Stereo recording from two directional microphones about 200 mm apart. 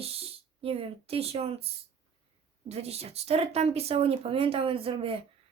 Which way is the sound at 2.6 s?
30° right (ahead or behind).